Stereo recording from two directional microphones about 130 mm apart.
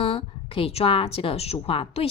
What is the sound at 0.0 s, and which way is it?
A woman's voice, 45° left (ahead or behind).